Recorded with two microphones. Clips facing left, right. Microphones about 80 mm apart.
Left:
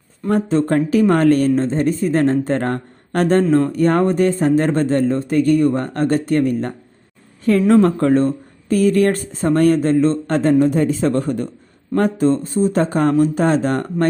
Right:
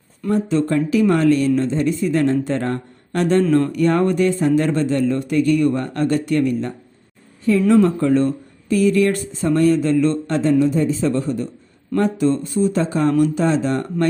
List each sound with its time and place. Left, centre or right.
0.4 s speech: left
3.5 s speech: left
12.7 s speech: left